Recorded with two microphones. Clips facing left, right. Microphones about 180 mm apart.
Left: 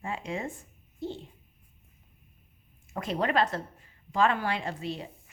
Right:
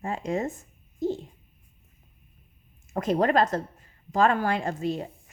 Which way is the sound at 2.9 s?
45° right (ahead or behind).